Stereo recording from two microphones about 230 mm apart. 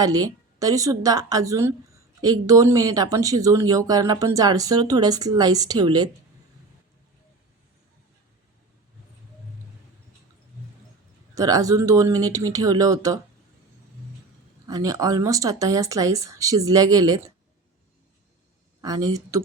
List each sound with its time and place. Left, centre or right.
0.0 s a woman's voice: centre
11.3 s a woman's voice: centre
14.7 s a woman's voice: centre
18.8 s a woman's voice: centre